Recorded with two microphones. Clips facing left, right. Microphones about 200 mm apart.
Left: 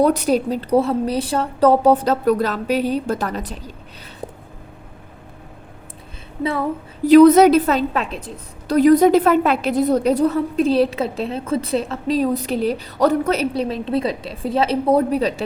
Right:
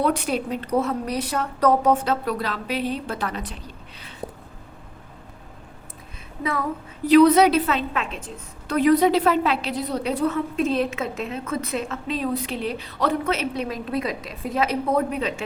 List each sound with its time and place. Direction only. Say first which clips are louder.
0.0 s a woman's voice: left 7 dB; 40° left (ahead or behind)
6.4 s a woman's voice: left 5 dB; 30° left (ahead or behind)
7.1 s a woman's voice: left 5 dB; 45° left (ahead or behind)